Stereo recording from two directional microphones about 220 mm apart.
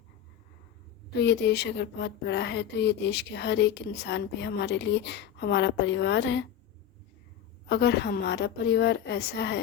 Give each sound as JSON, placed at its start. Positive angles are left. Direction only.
{"t": 1.2, "sound": "speech", "side_deg": 50}
{"t": 7.7, "sound": "speech", "side_deg": 50}